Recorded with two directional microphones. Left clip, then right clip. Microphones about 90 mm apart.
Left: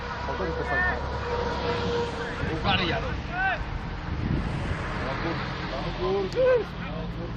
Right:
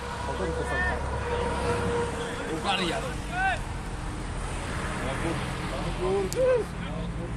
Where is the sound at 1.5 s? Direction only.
35° left (ahead or behind).